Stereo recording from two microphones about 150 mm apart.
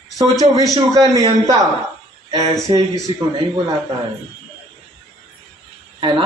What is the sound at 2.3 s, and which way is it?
Speech, 20° right (ahead or behind).